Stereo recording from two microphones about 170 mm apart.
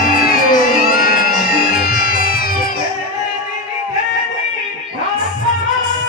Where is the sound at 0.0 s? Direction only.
60° left (ahead or behind).